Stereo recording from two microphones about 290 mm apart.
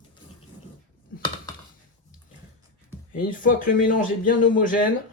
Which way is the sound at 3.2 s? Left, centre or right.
Left.